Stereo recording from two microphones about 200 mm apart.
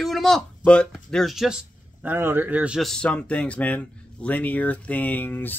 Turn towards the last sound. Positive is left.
turn(degrees=10)  # may be behind; listen again after turning